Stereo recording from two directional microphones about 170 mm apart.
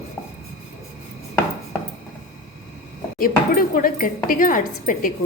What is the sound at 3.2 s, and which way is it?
Speech, 55° left (ahead or behind).